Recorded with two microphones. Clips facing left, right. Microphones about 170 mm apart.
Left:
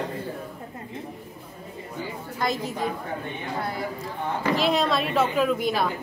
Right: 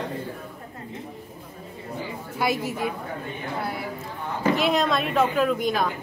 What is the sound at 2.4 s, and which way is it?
Speech, 5° right (ahead or behind).